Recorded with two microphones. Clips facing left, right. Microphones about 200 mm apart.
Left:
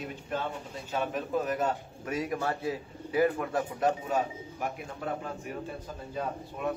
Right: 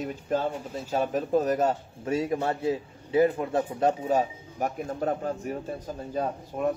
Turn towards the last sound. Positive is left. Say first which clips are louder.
# right 6 dB
turn(degrees=-45)  # may be behind; listen again after turning